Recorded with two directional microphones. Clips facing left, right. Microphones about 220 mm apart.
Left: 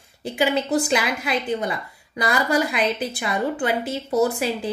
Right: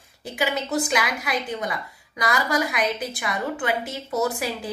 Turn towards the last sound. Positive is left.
turn(degrees=30)  # may be behind; listen again after turning